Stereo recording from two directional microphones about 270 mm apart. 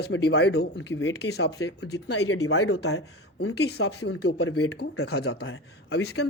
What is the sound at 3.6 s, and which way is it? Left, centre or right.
Speech, left.